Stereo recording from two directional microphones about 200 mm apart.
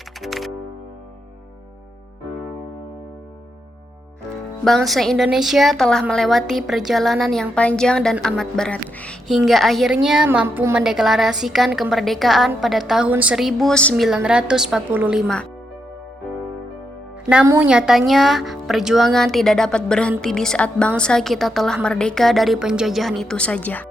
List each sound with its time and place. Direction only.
0.2 s music: centre (ahead or behind)
4.6 s a woman's voice: centre (ahead or behind)
17.4 s a woman's voice: 15° right (ahead or behind)
17.7 s a woman's voice: 5° right (ahead or behind)